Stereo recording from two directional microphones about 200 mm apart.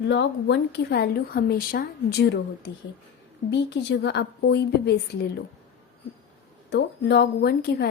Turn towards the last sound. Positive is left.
turn(degrees=50)  # may be behind; listen again after turning